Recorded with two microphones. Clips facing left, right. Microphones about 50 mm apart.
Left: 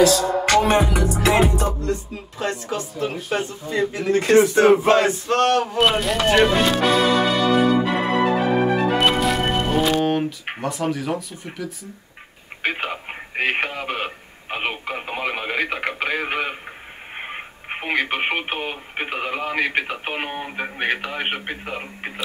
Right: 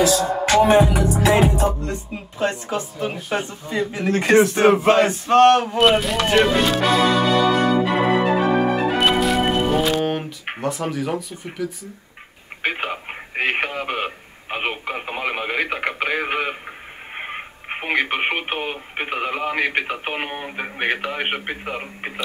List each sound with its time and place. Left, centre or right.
0.5 s music: centre
1.9 s speech: right
5.8 s speech: centre